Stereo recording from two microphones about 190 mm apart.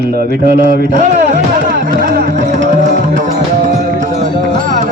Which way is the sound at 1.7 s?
45° right (ahead or behind).